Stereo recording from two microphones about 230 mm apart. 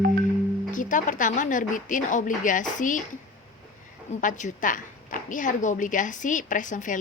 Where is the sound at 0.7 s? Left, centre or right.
Left.